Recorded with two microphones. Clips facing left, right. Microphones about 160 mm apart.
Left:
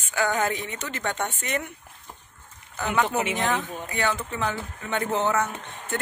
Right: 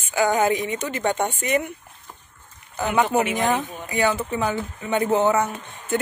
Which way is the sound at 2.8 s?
15° right (ahead or behind).